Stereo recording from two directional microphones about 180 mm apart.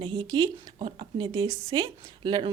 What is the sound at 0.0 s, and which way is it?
A woman's voice, 25° right (ahead or behind).